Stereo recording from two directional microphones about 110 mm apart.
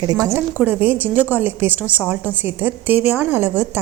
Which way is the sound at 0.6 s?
15° right (ahead or behind).